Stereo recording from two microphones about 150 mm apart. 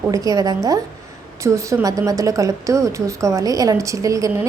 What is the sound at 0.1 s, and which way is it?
A woman's voice, 25° right (ahead or behind).